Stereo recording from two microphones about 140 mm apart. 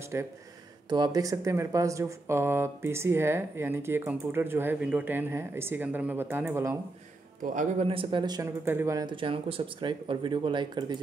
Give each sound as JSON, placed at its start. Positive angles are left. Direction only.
{"t": 0.1, "sound": "speech", "side_deg": -20}
{"t": 0.8, "sound": "speech", "side_deg": -30}
{"t": 7.8, "sound": "speech", "side_deg": -40}
{"t": 8.6, "sound": "speech", "side_deg": -20}
{"t": 9.0, "sound": "speech", "side_deg": -40}